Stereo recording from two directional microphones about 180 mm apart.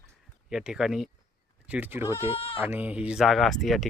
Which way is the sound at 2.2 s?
30° left (ahead or behind).